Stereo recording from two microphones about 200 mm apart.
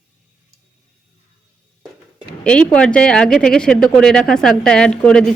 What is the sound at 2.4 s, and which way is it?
Speech, 5° left (ahead or behind).